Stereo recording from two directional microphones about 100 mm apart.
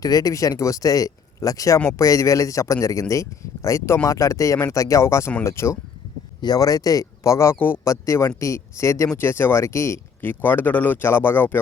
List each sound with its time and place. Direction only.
0.0 s speech: 40° left (ahead or behind)
6.4 s speech: 40° left (ahead or behind); by 11.6 s 20° left (ahead or behind)